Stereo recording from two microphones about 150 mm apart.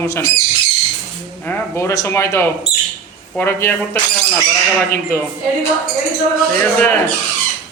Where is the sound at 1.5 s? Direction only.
20° left (ahead or behind).